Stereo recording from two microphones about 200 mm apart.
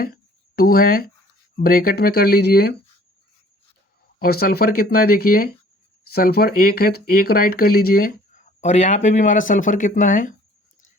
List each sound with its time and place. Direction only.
0.0 s a sound: 50° left (ahead or behind)
1.5 s speech: 45° left (ahead or behind)
4.2 s speech: 50° left (ahead or behind)
8.6 s speech: 35° left (ahead or behind)